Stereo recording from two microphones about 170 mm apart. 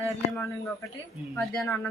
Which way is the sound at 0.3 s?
15° left (ahead or behind).